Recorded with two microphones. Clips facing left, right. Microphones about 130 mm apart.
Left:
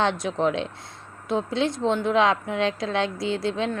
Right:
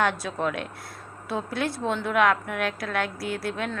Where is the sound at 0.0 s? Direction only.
20° left (ahead or behind).